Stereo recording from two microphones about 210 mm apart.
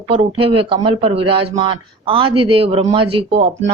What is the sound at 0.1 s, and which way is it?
A man's voice, 25° right (ahead or behind).